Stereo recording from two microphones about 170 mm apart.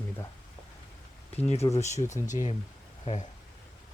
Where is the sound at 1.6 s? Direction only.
25° left (ahead or behind).